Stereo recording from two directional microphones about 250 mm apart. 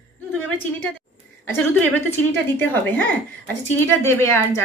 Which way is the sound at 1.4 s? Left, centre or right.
Centre.